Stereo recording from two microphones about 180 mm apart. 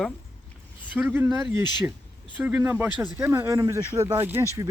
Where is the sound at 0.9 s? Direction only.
10° right (ahead or behind).